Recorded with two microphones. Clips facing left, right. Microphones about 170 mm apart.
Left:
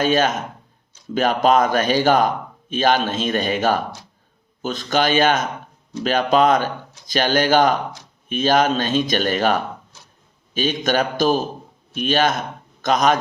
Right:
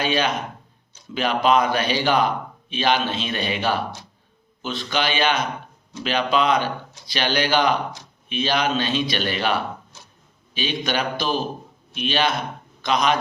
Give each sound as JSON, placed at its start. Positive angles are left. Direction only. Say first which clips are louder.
{"t": 0.0, "sound": "a man's voice", "louder": "left 4 dB", "side_deg": 45}